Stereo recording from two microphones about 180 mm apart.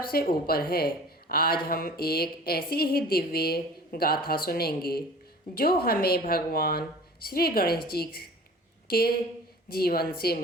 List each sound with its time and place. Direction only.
0.1 s speech: 60° left (ahead or behind)